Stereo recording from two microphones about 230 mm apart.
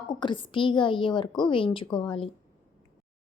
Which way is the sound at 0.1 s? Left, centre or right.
Centre.